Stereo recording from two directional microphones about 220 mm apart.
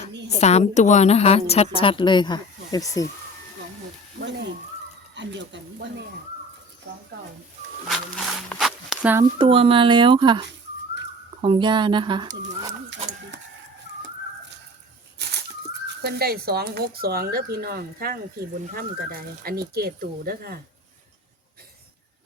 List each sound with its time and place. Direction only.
0.3 s a woman's voice: 30° left (ahead or behind)
4.2 s frying: 50° right (ahead or behind)
5.1 s speech: 55° right (ahead or behind)
7.9 s a sound: centre (ahead or behind)
9.4 s speech: 25° right (ahead or behind)
15.2 s bird: 50° right (ahead or behind)
16.0 s speech: 45° right (ahead or behind)